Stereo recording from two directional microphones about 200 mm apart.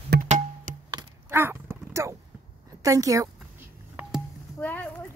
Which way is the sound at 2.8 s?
15° right (ahead or behind).